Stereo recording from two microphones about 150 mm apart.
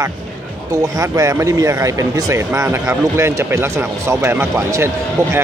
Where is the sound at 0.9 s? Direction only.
20° right (ahead or behind).